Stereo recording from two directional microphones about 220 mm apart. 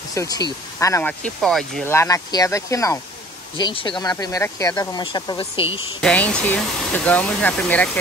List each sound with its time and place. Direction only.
0.1 s speech: 15° left (ahead or behind)
5.9 s speech: 5° left (ahead or behind)